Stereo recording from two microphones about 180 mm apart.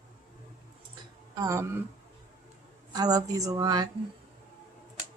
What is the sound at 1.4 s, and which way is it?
Speech, 15° right (ahead or behind).